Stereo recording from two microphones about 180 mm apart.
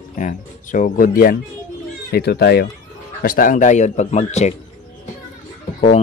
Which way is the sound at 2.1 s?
65° left (ahead or behind).